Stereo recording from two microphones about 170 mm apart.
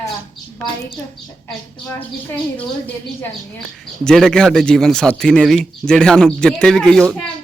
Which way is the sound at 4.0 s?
5° left (ahead or behind).